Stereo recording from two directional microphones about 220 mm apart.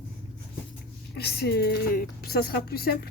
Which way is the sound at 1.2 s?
45° left (ahead or behind).